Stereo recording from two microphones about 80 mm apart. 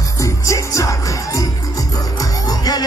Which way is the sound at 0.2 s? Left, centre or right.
Left.